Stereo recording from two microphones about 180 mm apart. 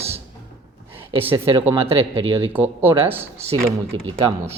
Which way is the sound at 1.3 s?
25° right (ahead or behind).